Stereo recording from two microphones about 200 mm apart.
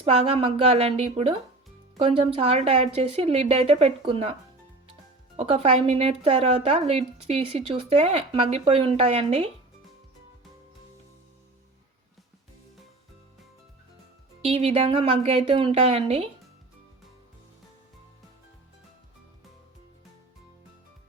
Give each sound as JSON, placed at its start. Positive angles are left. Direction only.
{"t": 0.0, "sound": "speech", "side_deg": -35}
{"t": 5.4, "sound": "speech", "side_deg": -30}
{"t": 14.4, "sound": "a woman's voice", "side_deg": -30}